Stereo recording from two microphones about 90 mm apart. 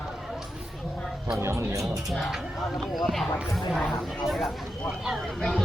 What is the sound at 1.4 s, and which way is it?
Speech, 30° right (ahead or behind).